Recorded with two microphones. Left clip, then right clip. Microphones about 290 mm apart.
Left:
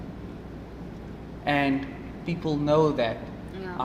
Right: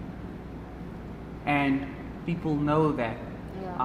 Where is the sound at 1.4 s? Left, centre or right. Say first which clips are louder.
Left 1 dB; centre.